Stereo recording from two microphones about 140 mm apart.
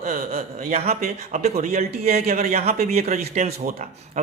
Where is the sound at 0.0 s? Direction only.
90° right.